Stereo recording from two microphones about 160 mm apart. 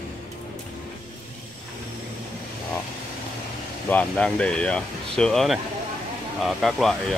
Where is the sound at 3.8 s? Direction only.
10° left (ahead or behind).